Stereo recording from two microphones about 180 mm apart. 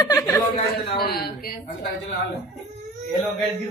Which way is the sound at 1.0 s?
60° left (ahead or behind).